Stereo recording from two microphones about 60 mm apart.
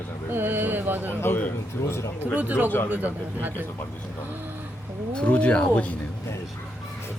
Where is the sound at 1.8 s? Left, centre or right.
Left.